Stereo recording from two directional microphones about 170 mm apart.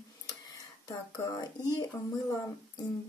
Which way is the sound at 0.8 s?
20° left (ahead or behind).